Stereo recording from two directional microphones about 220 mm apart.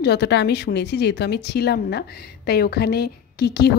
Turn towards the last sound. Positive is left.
turn(degrees=50)  # may be behind; listen again after turning